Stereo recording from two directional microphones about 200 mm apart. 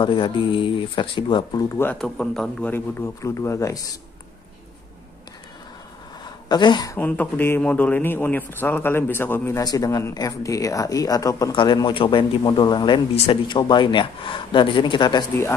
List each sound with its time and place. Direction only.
0.0 s speech: 25° left (ahead or behind)
1.8 s a man's voice: 5° left (ahead or behind)
6.5 s speech: 20° left (ahead or behind)
7.0 s a man's voice: 10° left (ahead or behind)